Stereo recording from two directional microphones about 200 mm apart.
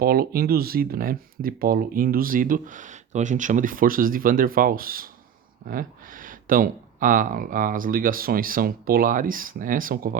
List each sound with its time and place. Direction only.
0.0 s speech: 50° right (ahead or behind)